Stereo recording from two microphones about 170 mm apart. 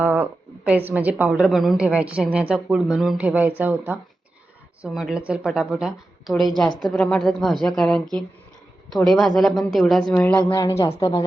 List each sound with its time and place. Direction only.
0.0 s a woman's voice: 10° right (ahead or behind)
9.0 s speech: centre (ahead or behind); by 11.3 s 25° left (ahead or behind)